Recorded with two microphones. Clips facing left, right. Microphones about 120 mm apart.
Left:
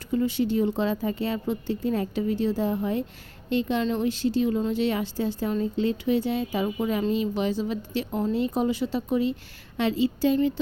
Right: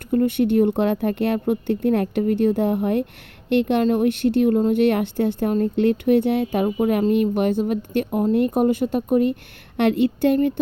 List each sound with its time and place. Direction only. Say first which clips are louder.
0.1 s a woman's voice: right 6 dB; 55° right (ahead or behind)